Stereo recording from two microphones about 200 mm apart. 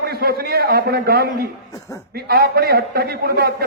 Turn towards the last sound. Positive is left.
turn(degrees=-50)  # may be behind; listen again after turning